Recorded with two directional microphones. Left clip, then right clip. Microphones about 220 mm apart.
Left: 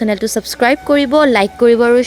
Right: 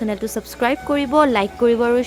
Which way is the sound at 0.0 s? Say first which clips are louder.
Left 8 dB; 30° left (ahead or behind).